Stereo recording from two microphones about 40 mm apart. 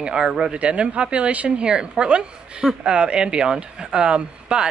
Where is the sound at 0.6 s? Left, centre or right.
Right.